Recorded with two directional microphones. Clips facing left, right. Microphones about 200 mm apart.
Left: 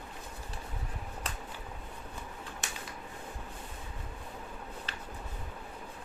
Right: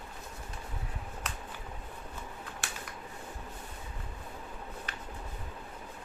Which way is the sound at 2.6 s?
20° left (ahead or behind).